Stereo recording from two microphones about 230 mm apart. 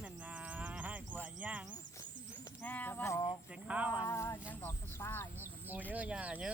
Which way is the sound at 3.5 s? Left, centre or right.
Centre.